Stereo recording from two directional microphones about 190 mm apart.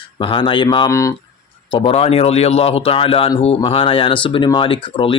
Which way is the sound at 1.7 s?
30° left (ahead or behind).